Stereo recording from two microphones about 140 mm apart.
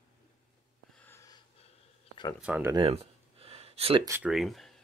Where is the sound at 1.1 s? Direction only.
20° left (ahead or behind).